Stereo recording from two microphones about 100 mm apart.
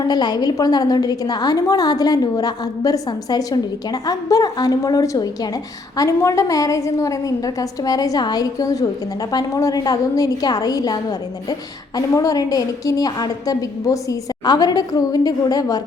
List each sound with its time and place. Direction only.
0.0 s a woman's voice: 45° left (ahead or behind)